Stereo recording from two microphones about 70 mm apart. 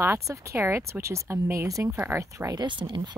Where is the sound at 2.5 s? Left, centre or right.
Right.